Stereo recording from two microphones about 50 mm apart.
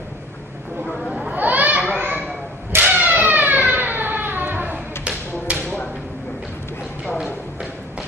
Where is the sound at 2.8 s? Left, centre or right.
Right.